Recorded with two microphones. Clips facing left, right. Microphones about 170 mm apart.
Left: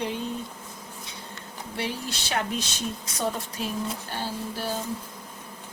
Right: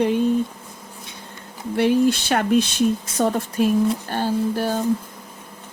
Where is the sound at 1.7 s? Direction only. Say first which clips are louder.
Right 16 dB; 55° right (ahead or behind).